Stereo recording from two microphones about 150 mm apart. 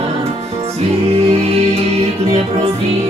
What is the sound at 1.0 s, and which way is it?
Music, 40° right (ahead or behind).